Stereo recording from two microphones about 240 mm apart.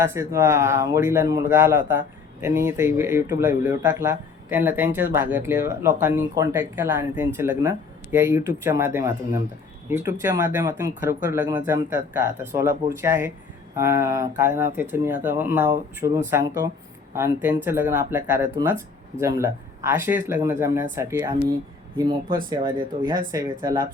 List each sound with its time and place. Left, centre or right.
0.0 s speech: centre